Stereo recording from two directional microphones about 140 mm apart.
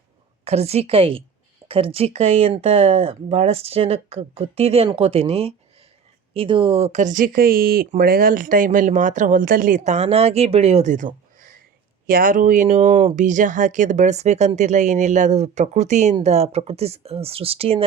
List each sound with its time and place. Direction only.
0.4 s speech: 50° right (ahead or behind); by 11.4 s 65° right (ahead or behind)
12.0 s speech: 85° right; by 12.6 s 70° right (ahead or behind)
12.6 s speech: 50° right (ahead or behind)
13.1 s speech: 65° right (ahead or behind); by 17.8 s 45° right (ahead or behind)